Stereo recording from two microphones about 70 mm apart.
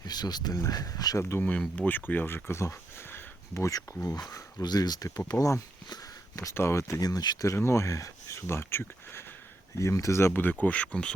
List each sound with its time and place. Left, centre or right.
0.0 s speech: left
1.2 s speech: left
1.5 s speech: centre; by 3.7 s left
3.7 s speech: left
4.6 s speech: left
5.3 s speech: left
5.9 s sniff: left
6.5 s speech: left
7.0 s speech: left
7.4 s speech: left
9.7 s speech: left
10.5 s speech: centre